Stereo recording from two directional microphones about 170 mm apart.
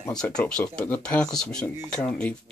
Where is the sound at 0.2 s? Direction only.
5° left (ahead or behind).